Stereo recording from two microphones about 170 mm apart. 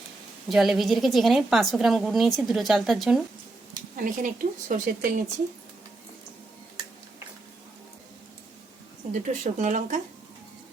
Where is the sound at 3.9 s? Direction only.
50° right (ahead or behind).